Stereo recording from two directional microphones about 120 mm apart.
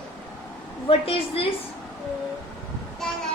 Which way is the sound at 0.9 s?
50° left (ahead or behind).